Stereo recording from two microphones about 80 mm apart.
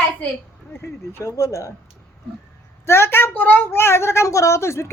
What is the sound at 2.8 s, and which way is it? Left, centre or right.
A woman's voice, left.